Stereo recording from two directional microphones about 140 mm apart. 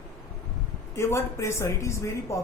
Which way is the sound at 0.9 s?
20° left (ahead or behind).